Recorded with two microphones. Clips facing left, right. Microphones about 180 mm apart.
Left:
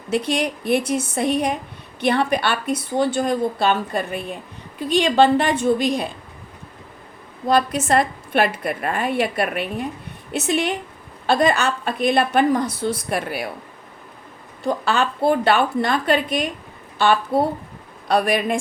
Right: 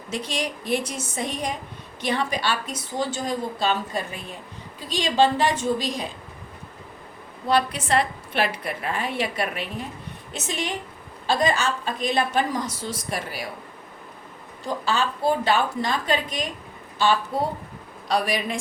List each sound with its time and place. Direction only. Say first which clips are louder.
0.1 s speech: left 7 dB; 60° left (ahead or behind)
7.4 s a woman's voice: left 4 dB; 45° left (ahead or behind)
14.7 s speech: left 4 dB; 60° left (ahead or behind)